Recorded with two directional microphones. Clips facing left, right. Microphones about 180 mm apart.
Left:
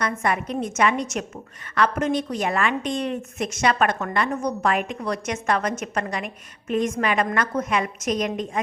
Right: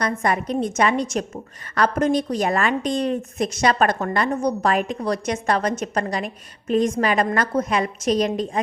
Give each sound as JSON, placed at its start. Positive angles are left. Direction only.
{"t": 0.0, "sound": "a woman's voice", "side_deg": -35}